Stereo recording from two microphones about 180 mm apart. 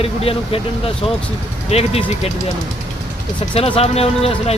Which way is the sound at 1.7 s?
35° left (ahead or behind).